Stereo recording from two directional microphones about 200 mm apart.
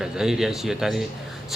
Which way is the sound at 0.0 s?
Centre (ahead or behind).